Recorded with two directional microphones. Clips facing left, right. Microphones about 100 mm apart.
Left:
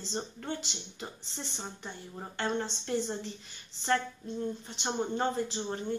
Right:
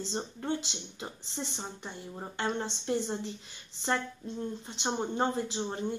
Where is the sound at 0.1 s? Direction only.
20° right (ahead or behind).